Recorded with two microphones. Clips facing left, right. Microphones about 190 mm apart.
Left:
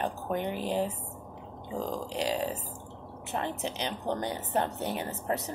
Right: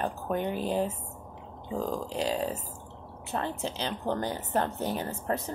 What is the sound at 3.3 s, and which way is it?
A woman's voice, 15° left (ahead or behind).